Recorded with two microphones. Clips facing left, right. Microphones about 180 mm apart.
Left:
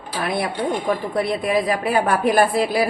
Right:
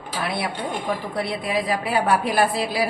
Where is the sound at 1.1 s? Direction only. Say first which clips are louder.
Left 5 dB; 50° left (ahead or behind).